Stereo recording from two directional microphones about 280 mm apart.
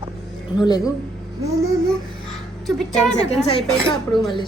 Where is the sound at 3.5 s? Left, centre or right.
Centre.